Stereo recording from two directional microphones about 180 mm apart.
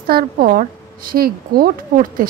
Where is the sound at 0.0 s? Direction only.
55° right (ahead or behind).